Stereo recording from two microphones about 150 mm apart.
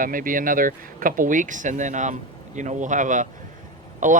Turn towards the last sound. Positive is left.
turn(degrees=-55)  # may be behind; listen again after turning